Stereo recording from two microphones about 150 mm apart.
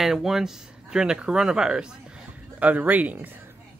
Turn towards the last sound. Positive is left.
turn(degrees=-10)  # may be behind; listen again after turning